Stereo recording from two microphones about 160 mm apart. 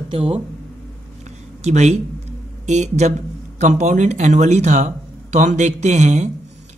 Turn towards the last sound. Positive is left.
turn(degrees=-45)  # may be behind; listen again after turning